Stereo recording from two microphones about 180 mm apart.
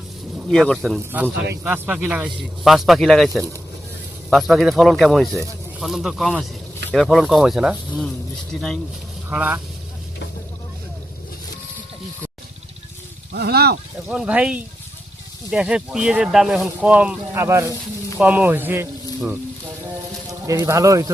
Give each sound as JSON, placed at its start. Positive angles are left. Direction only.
{"t": 0.3, "sound": "speech", "side_deg": 0}
{"t": 4.3, "sound": "speech", "side_deg": 0}
{"t": 9.3, "sound": "speech", "side_deg": -10}
{"t": 13.3, "sound": "speech", "side_deg": -60}
{"t": 14.1, "sound": "speech", "side_deg": -5}
{"t": 20.5, "sound": "speech", "side_deg": -15}